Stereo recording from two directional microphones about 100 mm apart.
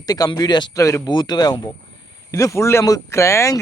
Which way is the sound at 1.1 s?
45° left (ahead or behind).